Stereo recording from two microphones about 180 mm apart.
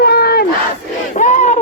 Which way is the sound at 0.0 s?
60° left (ahead or behind).